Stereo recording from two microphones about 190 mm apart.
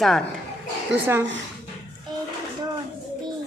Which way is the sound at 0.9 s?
70° right (ahead or behind).